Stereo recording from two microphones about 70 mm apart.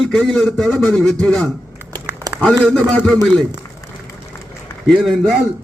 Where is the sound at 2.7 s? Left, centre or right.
Centre.